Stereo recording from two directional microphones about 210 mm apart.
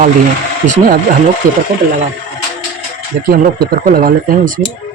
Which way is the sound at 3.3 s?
45° right (ahead or behind).